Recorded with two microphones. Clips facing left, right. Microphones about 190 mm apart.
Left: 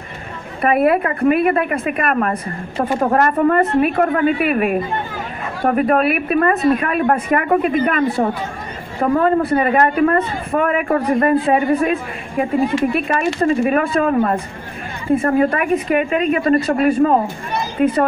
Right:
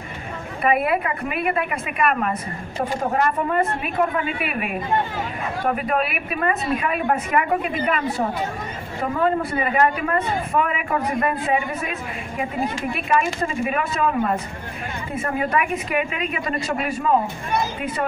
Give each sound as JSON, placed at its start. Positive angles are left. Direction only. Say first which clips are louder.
{"t": 0.6, "sound": "speech", "louder": "left 6 dB", "side_deg": 45}